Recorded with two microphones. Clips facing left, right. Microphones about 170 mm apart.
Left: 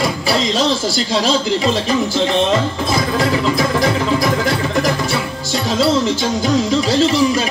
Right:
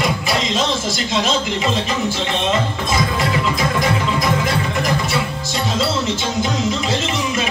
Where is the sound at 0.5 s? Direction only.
35° left (ahead or behind).